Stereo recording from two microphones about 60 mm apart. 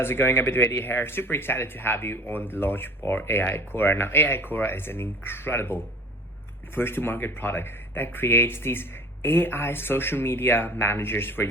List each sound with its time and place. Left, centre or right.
0.0 s speech: left